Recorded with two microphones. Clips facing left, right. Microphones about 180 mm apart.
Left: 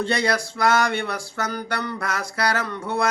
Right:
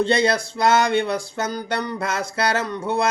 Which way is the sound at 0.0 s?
25° right (ahead or behind).